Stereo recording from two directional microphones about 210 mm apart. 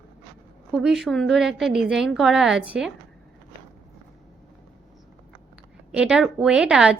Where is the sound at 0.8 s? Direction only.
Centre (ahead or behind).